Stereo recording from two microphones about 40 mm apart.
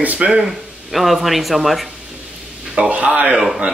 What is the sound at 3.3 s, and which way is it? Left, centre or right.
Speech, centre.